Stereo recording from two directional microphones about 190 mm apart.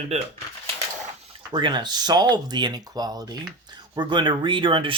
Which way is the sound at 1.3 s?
25° right (ahead or behind).